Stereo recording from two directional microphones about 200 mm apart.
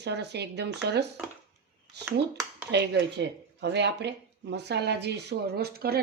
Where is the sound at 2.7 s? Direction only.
60° right (ahead or behind).